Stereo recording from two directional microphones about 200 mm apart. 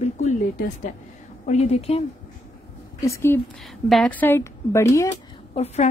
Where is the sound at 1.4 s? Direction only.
35° left (ahead or behind).